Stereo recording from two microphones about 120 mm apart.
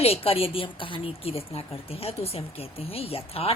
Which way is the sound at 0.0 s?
55° left (ahead or behind).